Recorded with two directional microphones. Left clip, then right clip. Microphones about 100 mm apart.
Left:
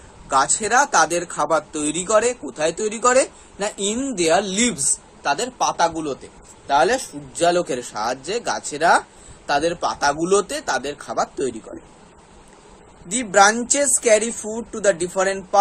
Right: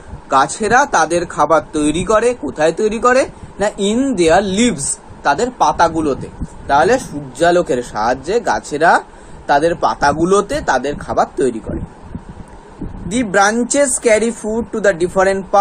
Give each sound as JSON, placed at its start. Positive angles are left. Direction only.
{"t": 0.3, "sound": "speech", "side_deg": 15}
{"t": 5.2, "sound": "a man's voice", "side_deg": 5}
{"t": 5.8, "sound": "a man's voice", "side_deg": -10}
{"t": 6.7, "sound": "speech", "side_deg": 5}
{"t": 7.3, "sound": "speech", "side_deg": 15}
{"t": 13.1, "sound": "speech", "side_deg": 10}